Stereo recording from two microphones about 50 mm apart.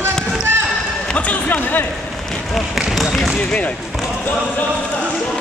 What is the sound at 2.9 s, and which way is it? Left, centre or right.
Basketball bounce, centre.